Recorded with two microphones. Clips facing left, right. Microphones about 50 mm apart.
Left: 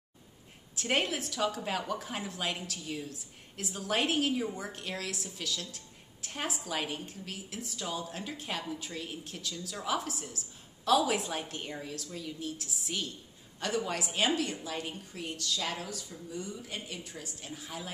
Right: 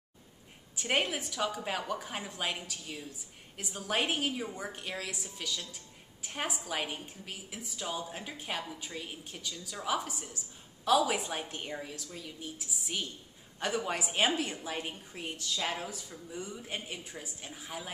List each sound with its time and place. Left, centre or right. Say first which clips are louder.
0.7 s a woman's voice: even; centre; by 17.1 s right
17.1 s a woman's voice: left 1 dB; centre